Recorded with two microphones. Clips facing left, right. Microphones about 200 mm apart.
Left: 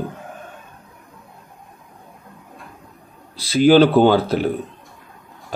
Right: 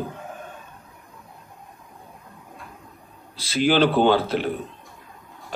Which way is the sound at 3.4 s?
40° left (ahead or behind).